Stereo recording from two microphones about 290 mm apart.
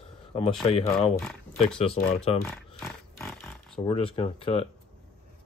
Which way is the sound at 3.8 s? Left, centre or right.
Centre.